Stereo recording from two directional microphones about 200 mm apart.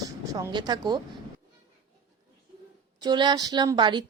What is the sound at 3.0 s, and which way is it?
Speech, 20° right (ahead or behind).